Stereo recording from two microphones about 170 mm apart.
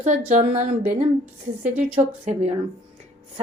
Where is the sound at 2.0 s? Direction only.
15° right (ahead or behind).